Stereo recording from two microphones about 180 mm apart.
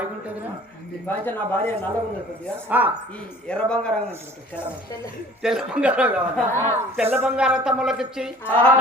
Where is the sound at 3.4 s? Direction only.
5° left (ahead or behind).